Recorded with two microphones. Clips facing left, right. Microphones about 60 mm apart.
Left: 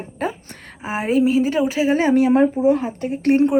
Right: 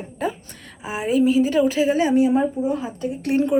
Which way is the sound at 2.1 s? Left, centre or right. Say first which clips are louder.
Left 3 dB; left.